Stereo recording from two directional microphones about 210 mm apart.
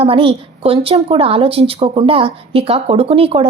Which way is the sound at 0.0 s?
25° right (ahead or behind).